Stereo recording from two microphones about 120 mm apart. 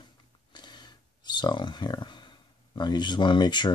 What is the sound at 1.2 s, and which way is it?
Speech, 40° left (ahead or behind).